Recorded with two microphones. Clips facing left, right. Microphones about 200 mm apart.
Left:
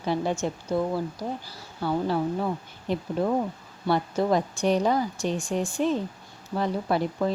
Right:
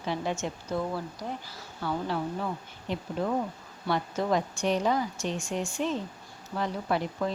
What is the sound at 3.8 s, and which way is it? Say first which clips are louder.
A woman's voice: left 4 dB; 30° left (ahead or behind).